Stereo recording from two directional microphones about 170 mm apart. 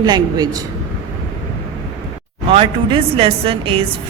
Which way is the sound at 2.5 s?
35° right (ahead or behind).